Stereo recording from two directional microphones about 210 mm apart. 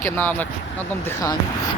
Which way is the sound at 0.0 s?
10° left (ahead or behind).